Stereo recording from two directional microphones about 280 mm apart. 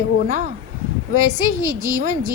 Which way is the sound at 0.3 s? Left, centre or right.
Right.